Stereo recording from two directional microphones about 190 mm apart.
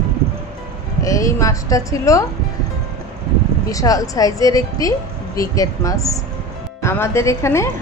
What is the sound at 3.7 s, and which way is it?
A woman's voice, 20° left (ahead or behind).